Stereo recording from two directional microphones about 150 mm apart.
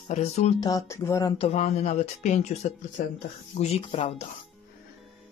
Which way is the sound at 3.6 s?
45° left (ahead or behind).